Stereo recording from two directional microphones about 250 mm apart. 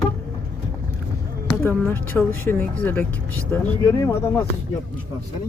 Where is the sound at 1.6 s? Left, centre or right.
Centre.